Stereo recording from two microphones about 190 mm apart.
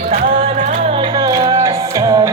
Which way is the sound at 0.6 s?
35° right (ahead or behind).